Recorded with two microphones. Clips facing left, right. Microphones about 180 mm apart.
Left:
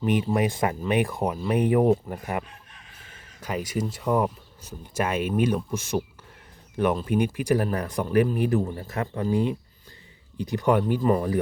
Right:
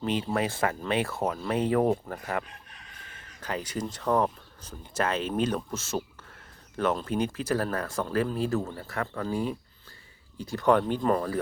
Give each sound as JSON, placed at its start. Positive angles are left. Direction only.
{"t": 0.0, "sound": "speech", "side_deg": 15}
{"t": 3.4, "sound": "speech", "side_deg": 10}